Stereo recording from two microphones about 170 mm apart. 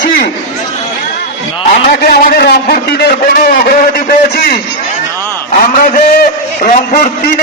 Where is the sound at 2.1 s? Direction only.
60° left (ahead or behind).